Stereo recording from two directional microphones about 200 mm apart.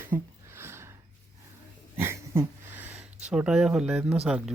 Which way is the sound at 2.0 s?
10° right (ahead or behind).